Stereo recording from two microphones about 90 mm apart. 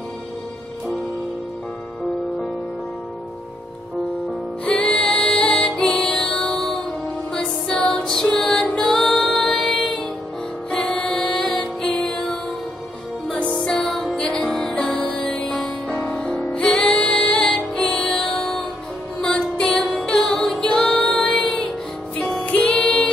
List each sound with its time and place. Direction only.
4.6 s music: 10° left (ahead or behind)
13.3 s music: 15° left (ahead or behind)
13.6 s music: 5° left (ahead or behind)